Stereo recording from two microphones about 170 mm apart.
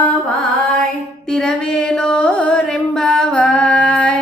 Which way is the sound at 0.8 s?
5° left (ahead or behind).